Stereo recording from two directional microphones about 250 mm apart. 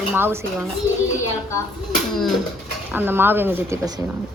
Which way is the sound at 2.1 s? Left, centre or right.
Centre.